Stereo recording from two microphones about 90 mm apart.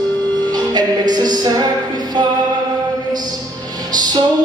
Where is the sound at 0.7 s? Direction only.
50° right (ahead or behind).